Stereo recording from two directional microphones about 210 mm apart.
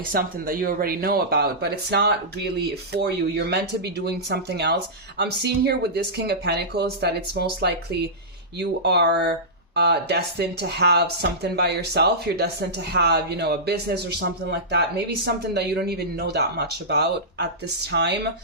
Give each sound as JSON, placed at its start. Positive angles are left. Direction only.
{"t": 0.1, "sound": "speech", "side_deg": -45}